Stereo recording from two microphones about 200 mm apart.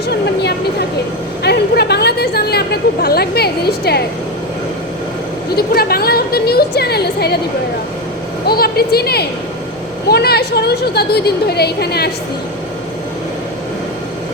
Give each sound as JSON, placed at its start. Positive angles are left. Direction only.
{"t": 1.5, "sound": "chatter", "side_deg": 55}
{"t": 5.5, "sound": "a woman's voice", "side_deg": 50}
{"t": 8.4, "sound": "a woman's voice", "side_deg": 50}